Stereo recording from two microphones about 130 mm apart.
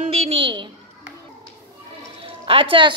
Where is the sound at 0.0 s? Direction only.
50° right (ahead or behind).